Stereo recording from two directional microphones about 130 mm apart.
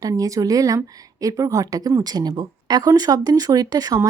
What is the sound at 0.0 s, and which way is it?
Speech, 25° right (ahead or behind).